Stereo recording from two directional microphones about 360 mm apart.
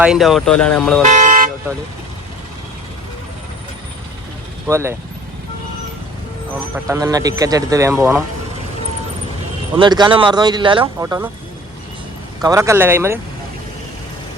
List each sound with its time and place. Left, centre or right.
0.0 s speech: centre
1.0 s vehicle: right
4.7 s speech: centre
6.7 s speech: centre
9.7 s speech: centre
12.4 s speech: centre